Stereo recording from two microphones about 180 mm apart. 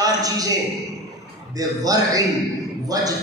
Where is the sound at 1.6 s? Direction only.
20° right (ahead or behind).